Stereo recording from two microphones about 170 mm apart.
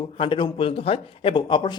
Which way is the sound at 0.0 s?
30° left (ahead or behind).